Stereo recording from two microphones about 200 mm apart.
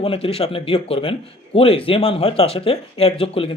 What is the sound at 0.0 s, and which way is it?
Speech, 30° left (ahead or behind).